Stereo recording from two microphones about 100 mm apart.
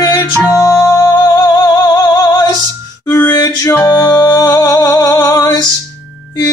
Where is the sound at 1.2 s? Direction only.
35° left (ahead or behind).